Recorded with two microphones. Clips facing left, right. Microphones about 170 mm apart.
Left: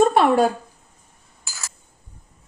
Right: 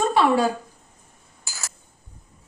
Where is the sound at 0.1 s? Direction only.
50° left (ahead or behind).